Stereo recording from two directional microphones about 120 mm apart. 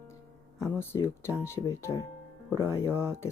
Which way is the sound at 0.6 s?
20° left (ahead or behind).